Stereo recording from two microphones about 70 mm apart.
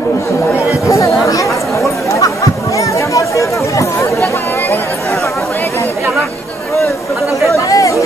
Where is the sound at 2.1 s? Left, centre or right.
Left.